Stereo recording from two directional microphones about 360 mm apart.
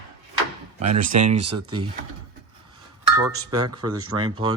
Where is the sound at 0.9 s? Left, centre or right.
Right.